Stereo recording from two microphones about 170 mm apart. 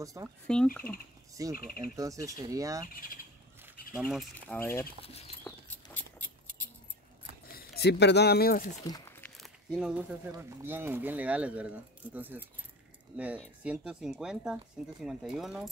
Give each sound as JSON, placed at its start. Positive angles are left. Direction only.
{"t": 0.0, "sound": "speech", "side_deg": -20}
{"t": 0.5, "sound": "speech", "side_deg": 5}
{"t": 1.3, "sound": "speech", "side_deg": -20}
{"t": 2.9, "sound": "speech", "side_deg": 60}
{"t": 3.9, "sound": "speech", "side_deg": 0}
{"t": 4.6, "sound": "speech", "side_deg": 15}
{"t": 5.0, "sound": "speech", "side_deg": 35}
{"t": 5.9, "sound": "a sound", "side_deg": 15}
{"t": 7.5, "sound": "speech", "side_deg": 70}
{"t": 8.8, "sound": "speech", "side_deg": 20}
{"t": 9.2, "sound": "a sound", "side_deg": 0}
{"t": 10.3, "sound": "speech", "side_deg": -15}